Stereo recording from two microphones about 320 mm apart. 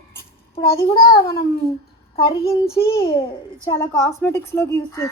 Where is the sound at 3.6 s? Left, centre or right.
Centre.